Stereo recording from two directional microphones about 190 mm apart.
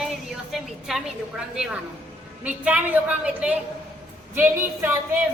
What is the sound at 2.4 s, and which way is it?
A woman's voice, 10° right (ahead or behind).